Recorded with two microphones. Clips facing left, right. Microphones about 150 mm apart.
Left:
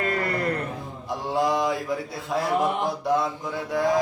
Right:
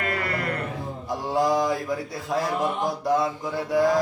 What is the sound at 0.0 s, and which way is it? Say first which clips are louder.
Music: left 2 dB; 30° left (ahead or behind).